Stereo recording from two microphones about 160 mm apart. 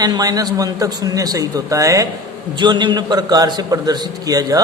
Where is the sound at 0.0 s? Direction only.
25° right (ahead or behind).